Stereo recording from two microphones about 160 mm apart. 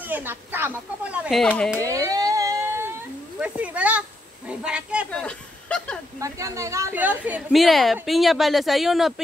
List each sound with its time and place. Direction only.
0.1 s speech: 10° right (ahead or behind)
1.9 s a sound: 20° right (ahead or behind)
3.3 s speech: 10° right (ahead or behind)
5.1 s speech: 5° left (ahead or behind)
6.1 s a woman's voice: 20° right (ahead or behind); by 9.1 s centre (ahead or behind)